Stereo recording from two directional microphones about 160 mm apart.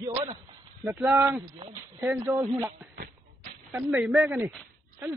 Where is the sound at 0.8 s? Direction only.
10° right (ahead or behind).